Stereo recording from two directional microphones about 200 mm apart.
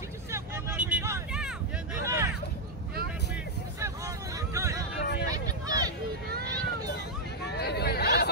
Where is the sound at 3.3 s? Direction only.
15° right (ahead or behind).